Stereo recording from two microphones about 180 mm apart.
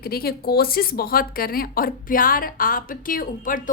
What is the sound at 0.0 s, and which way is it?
Speech, 60° left (ahead or behind).